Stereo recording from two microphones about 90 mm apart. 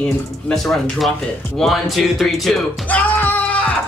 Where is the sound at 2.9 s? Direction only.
15° left (ahead or behind).